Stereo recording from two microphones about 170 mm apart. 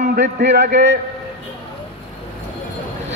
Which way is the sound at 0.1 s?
80° right.